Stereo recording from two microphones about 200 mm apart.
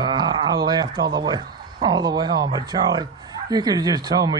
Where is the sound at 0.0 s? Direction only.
20° right (ahead or behind).